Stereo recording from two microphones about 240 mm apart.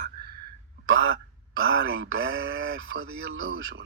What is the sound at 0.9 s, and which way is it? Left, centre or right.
Speech, right.